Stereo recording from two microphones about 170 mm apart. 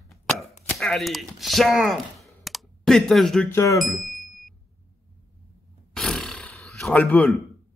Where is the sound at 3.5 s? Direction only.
20° left (ahead or behind).